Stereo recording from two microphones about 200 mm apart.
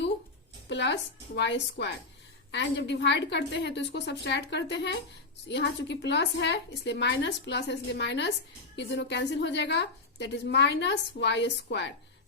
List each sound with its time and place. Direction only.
0.7 s a woman's voice: 60° left (ahead or behind)